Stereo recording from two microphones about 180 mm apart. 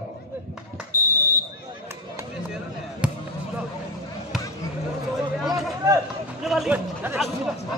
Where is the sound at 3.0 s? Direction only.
5° right (ahead or behind).